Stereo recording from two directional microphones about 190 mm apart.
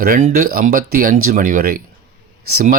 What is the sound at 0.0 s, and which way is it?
Speech, 45° right (ahead or behind).